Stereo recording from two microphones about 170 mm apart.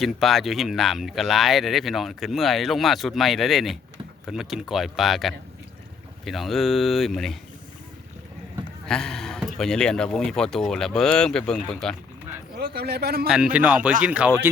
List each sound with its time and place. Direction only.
0.0 s speech: centre (ahead or behind)
8.9 s a sound: 5° left (ahead or behind)
9.6 s speech: 5° left (ahead or behind)
12.5 s a man's voice: 70° right (ahead or behind)
13.2 s speech: 5° right (ahead or behind)